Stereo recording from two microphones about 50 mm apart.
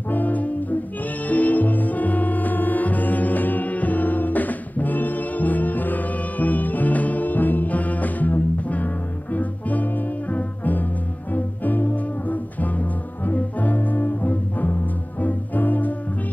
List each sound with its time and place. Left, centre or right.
0.1 s music: left